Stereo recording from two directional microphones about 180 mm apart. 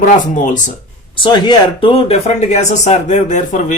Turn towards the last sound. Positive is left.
turn(degrees=40)  # may be behind; listen again after turning